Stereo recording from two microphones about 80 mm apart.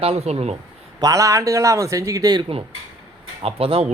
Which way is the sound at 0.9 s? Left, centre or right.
Right.